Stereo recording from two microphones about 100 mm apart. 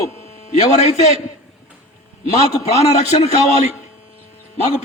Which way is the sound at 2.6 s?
90° left.